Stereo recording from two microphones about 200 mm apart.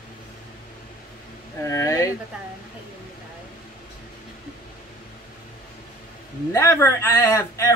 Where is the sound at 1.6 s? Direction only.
15° left (ahead or behind).